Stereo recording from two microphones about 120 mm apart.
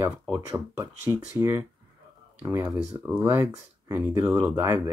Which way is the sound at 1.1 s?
20° right (ahead or behind).